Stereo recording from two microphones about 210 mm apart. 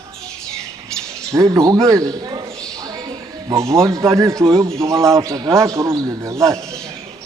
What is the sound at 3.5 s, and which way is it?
Speech, 15° right (ahead or behind).